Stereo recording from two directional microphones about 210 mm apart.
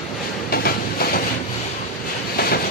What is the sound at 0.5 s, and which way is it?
Train, 45° left (ahead or behind).